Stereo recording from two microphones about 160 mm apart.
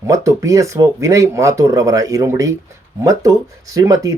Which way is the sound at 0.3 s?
20° right (ahead or behind).